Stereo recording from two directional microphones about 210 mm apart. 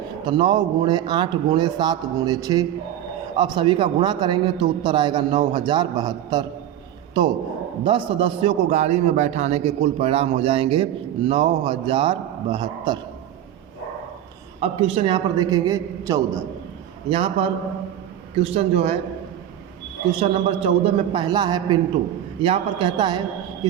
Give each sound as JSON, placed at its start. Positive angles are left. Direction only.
{"t": 0.3, "sound": "a man's voice", "side_deg": -20}
{"t": 14.6, "sound": "a man's voice", "side_deg": -25}
{"t": 17.1, "sound": "a man's voice", "side_deg": -25}
{"t": 20.1, "sound": "a man's voice", "side_deg": -25}